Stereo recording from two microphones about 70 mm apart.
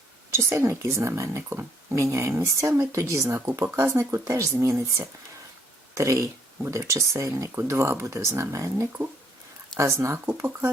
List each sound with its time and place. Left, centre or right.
0.3 s speech: right
1.4 s speech: right
1.9 s speech: right